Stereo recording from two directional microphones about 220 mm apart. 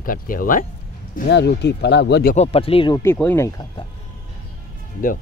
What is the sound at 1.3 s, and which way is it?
Speech, 50° left (ahead or behind).